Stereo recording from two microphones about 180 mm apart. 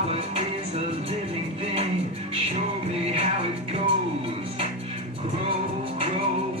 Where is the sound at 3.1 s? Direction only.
35° right (ahead or behind).